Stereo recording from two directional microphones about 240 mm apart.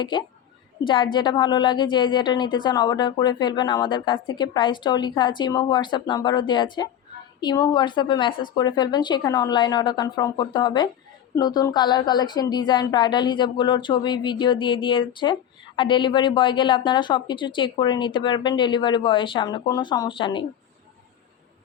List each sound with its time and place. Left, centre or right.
0.0 s a woman's voice: centre